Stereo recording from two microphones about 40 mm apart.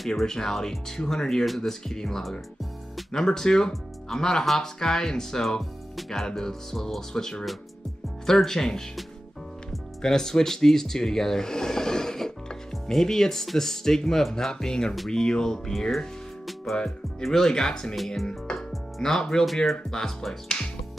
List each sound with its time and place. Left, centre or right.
0.1 s speech: centre
9.7 s music: centre
12.9 s speech: centre
17.9 s speech: centre
18.7 s music: centre
19.4 s speech: centre